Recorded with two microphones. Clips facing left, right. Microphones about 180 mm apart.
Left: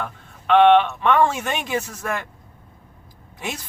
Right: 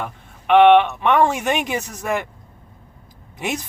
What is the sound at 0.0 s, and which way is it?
A man's voice, 15° right (ahead or behind).